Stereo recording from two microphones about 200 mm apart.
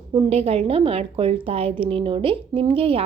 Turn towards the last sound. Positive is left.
turn(degrees=-30)  # may be behind; listen again after turning